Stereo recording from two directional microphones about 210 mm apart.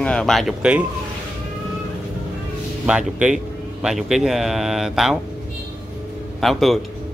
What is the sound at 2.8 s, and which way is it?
Speech, 5° right (ahead or behind).